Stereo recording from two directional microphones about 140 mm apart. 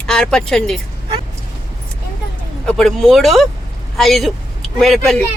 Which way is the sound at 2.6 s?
Centre (ahead or behind).